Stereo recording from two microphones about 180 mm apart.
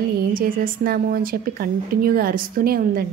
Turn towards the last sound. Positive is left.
turn(degrees=-55)  # may be behind; listen again after turning